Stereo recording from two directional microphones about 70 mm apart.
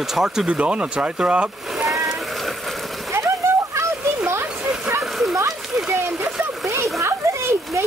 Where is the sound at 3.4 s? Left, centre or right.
Right.